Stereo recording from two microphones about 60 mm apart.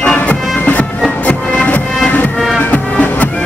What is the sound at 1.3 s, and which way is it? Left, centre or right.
Music, left.